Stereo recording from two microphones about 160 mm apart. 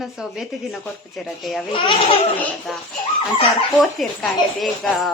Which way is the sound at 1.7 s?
30° left (ahead or behind).